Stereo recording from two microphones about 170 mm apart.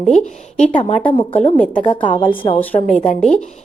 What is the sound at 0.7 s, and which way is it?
Speech, 35° left (ahead or behind).